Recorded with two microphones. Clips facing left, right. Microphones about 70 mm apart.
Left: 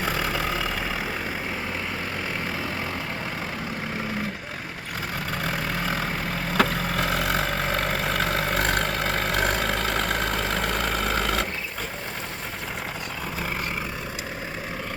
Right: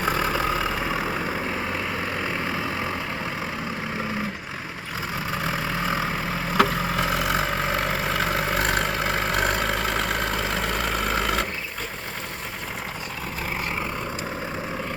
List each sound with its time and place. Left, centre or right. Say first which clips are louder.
0.0 s vehicle: right 3 dB; right
5.3 s vehicle: right 1 dB; centre